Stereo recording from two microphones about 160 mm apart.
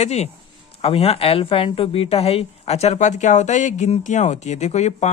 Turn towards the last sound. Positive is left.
turn(degrees=45)  # may be behind; listen again after turning